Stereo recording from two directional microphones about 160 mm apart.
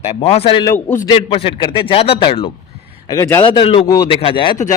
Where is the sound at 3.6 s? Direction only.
35° left (ahead or behind).